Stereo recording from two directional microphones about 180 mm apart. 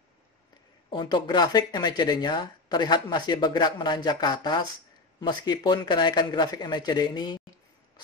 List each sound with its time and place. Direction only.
0.8 s speech: 25° left (ahead or behind)